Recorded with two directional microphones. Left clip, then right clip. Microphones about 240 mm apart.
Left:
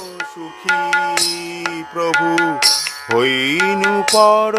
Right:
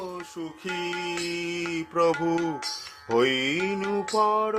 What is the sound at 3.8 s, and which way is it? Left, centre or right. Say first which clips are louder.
Music: left 12 dB; left.